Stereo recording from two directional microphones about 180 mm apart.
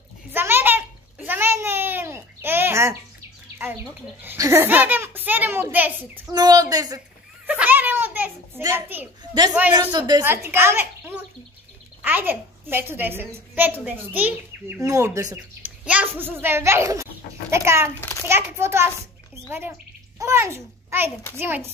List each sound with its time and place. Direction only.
0.3 s a sound: 10° right (ahead or behind)
4.2 s a child's voice: 15° right (ahead or behind)
6.3 s a woman's voice: 20° right (ahead or behind)
7.4 s a sound: 10° right (ahead or behind)
9.5 s a child's voice: 10° right (ahead or behind)
9.8 s a woman's voice: 20° right (ahead or behind)
15.6 s a child's voice: 5° right (ahead or behind)
20.2 s a child's voice: 15° right (ahead or behind)